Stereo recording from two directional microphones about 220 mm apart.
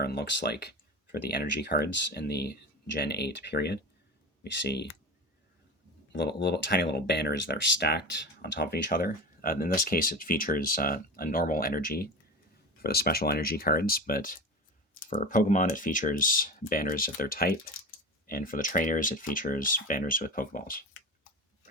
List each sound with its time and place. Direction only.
0.0 s speech: 45° left (ahead or behind)
6.1 s speech: 50° left (ahead or behind)